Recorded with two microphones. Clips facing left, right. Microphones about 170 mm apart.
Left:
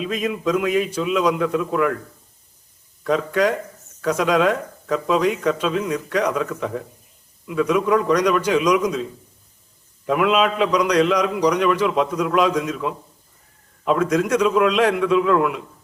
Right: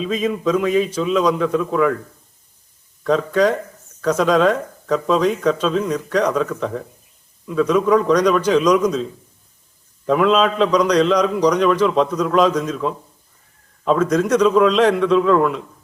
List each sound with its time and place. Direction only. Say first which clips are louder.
0.0 s a man's voice: right 3 dB; 5° left (ahead or behind)
3.0 s a man's voice: right 3 dB; 10° left (ahead or behind)
10.1 s a man's voice: right 3 dB; 5° left (ahead or behind)